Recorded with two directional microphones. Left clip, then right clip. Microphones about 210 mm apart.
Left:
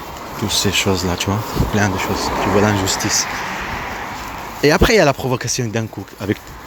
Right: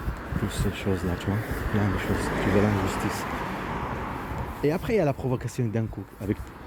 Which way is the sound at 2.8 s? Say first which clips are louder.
Left 10 dB; 50° right (ahead or behind).